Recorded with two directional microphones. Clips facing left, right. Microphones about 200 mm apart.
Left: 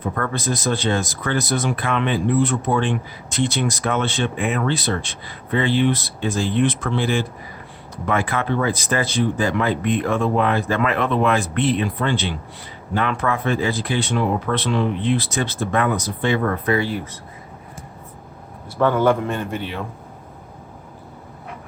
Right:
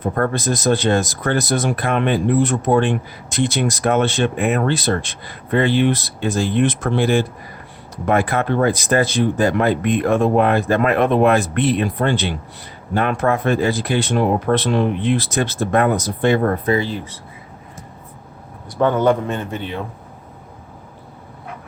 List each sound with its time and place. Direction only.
0.0 s speech: 45° right (ahead or behind)
18.8 s a man's voice: 20° right (ahead or behind)